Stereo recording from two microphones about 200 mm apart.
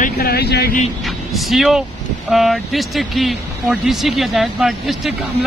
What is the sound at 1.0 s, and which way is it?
Speech, centre (ahead or behind).